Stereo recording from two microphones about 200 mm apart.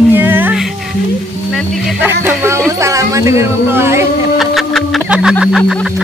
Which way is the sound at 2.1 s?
10° right (ahead or behind).